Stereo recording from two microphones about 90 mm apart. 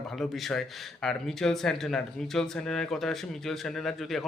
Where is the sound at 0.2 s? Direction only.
Centre (ahead or behind).